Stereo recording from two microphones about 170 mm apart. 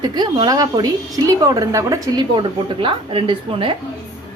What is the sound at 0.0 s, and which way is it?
A woman's voice, 25° right (ahead or behind).